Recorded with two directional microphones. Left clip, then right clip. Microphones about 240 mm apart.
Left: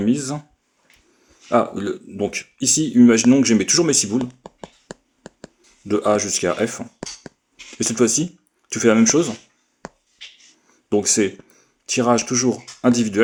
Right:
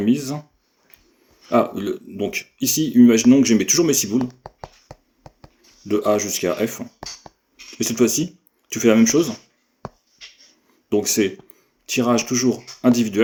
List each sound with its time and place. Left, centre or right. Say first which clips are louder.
0.0 s speech: even; left
1.5 s speech: even; left
5.9 s speech: left 1 dB; left
10.7 s speech: left 1 dB; left